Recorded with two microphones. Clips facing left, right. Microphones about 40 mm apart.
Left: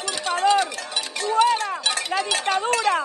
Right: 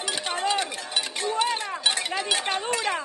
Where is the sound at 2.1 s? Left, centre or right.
Centre.